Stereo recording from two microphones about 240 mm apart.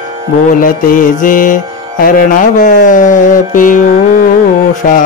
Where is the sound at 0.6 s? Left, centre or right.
Left.